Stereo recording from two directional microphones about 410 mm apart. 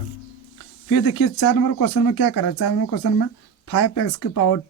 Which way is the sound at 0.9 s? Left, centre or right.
Left.